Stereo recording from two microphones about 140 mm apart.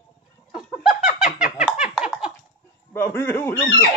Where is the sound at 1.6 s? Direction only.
5° right (ahead or behind).